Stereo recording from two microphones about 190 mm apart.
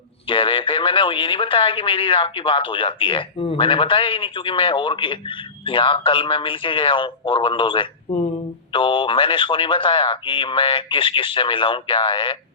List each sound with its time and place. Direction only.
0.3 s speech: 25° left (ahead or behind)